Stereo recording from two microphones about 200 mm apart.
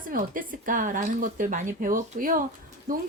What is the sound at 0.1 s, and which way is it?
A woman's voice, 45° right (ahead or behind).